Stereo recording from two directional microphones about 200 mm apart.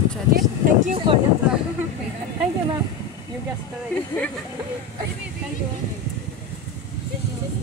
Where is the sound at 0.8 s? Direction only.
30° right (ahead or behind).